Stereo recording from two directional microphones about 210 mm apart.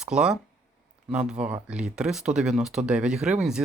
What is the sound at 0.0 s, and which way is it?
Speech, 5° right (ahead or behind).